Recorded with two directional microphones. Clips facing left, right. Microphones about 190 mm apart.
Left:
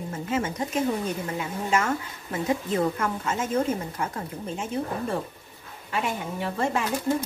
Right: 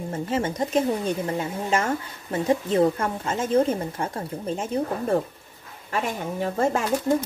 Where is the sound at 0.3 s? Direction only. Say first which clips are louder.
Right 3 dB; 35° right (ahead or behind).